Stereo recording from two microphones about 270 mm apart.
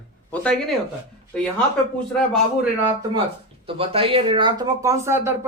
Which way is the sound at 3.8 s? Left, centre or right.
Right.